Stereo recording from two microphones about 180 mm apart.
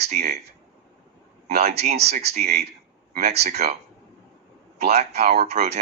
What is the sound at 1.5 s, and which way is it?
Speech, 35° right (ahead or behind).